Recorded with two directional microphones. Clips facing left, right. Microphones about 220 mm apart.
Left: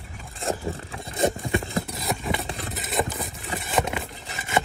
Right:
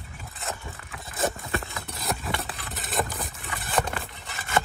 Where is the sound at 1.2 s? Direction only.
20° left (ahead or behind).